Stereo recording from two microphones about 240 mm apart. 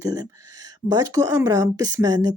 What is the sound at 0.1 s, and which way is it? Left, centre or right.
Speech, centre.